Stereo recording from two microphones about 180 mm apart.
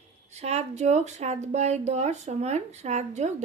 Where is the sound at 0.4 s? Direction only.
35° right (ahead or behind).